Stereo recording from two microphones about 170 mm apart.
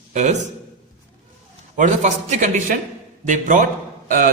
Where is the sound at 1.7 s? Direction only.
45° right (ahead or behind).